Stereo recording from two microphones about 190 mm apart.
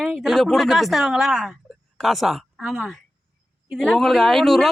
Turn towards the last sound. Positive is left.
turn(degrees=0)  # may be behind; listen again after turning